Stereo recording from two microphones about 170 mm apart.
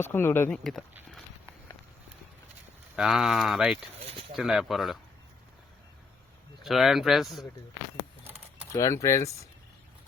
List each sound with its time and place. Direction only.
0.0 s speech: 15° left (ahead or behind)
0.5 s speech: centre (ahead or behind)
2.9 s speech: 5° right (ahead or behind)
4.0 s speech: 30° right (ahead or behind)
4.4 s speech: centre (ahead or behind)
6.6 s speech: centre (ahead or behind)
8.7 s speech: 20° left (ahead or behind)